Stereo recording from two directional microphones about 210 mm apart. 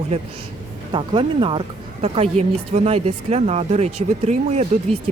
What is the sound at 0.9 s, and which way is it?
Speech, 25° right (ahead or behind).